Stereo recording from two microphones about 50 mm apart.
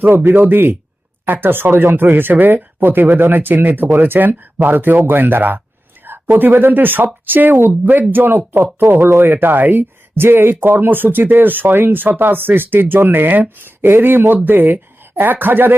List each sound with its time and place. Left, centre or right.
0.0 s speech: right